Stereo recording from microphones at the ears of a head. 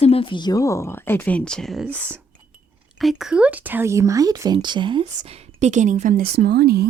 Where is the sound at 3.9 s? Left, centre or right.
Right.